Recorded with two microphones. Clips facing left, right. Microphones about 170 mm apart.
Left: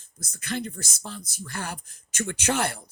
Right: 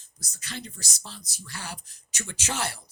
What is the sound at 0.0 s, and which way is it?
Speech, 55° left (ahead or behind).